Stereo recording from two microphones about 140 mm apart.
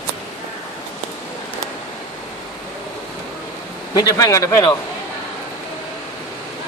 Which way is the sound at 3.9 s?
25° left (ahead or behind).